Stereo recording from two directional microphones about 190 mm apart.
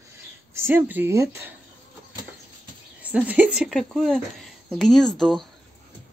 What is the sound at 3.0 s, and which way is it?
A woman's voice, 10° right (ahead or behind).